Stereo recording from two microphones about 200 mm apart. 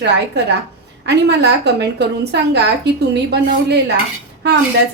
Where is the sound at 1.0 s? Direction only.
55° right (ahead or behind).